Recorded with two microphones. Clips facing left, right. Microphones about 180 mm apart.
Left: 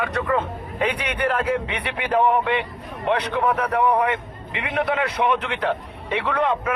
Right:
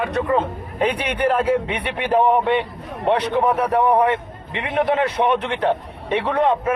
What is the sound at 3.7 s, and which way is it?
A man's voice, 30° right (ahead or behind).